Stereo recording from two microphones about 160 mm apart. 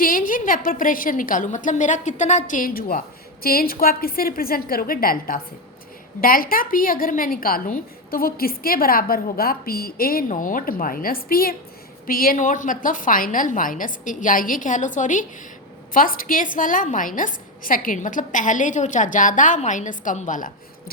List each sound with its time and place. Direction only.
0.0 s a woman's voice: 60° left (ahead or behind)